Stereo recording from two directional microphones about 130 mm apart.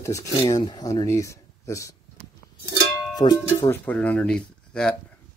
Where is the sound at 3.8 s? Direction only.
10° left (ahead or behind).